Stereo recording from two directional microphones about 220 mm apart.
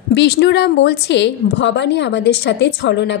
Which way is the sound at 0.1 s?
50° left (ahead or behind).